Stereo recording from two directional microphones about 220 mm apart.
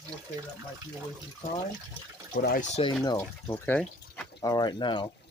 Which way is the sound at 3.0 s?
15° left (ahead or behind).